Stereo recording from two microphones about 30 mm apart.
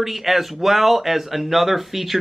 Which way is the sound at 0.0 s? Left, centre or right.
Centre.